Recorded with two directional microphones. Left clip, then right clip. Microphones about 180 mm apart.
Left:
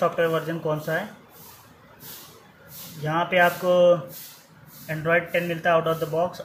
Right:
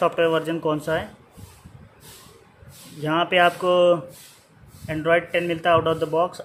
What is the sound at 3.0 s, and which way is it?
Speech, 40° right (ahead or behind).